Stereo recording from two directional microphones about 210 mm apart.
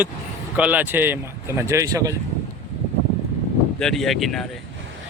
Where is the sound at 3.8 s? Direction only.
Centre (ahead or behind).